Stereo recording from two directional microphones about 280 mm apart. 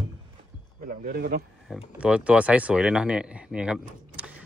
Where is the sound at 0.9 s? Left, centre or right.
Right.